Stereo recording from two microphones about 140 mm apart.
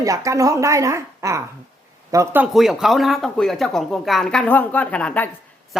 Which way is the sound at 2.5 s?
Centre (ahead or behind).